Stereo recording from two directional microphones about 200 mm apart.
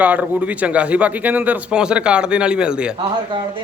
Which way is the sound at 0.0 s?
10° right (ahead or behind).